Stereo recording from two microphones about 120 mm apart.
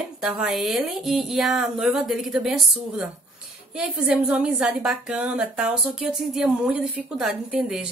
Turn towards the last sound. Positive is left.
turn(degrees=-5)  # may be behind; listen again after turning